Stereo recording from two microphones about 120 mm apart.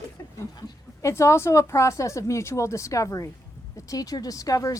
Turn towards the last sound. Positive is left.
turn(degrees=30)  # may be behind; listen again after turning